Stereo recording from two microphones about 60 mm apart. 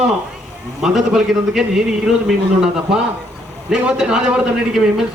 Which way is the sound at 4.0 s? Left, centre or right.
Centre.